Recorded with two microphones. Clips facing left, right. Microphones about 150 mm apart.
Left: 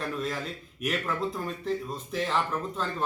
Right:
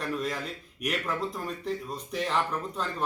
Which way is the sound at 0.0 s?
Centre (ahead or behind).